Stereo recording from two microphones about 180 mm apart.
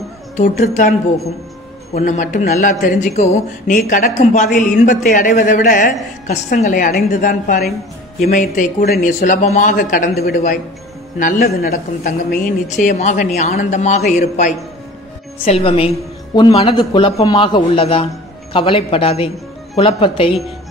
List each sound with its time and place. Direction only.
0.4 s speech: 45° left (ahead or behind)
6.2 s a man's voice: 40° left (ahead or behind)